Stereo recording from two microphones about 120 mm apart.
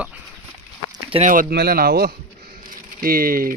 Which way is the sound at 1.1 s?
50° right (ahead or behind).